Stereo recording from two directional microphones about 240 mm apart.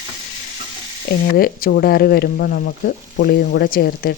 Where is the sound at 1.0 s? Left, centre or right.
Left.